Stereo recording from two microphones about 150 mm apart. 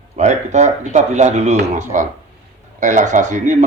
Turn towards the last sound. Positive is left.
turn(degrees=-50)  # may be behind; listen again after turning